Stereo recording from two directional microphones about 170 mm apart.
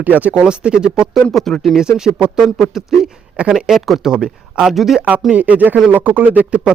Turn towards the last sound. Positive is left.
turn(degrees=-10)  # may be behind; listen again after turning